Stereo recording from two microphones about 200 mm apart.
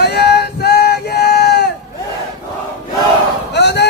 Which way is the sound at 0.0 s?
55° left (ahead or behind).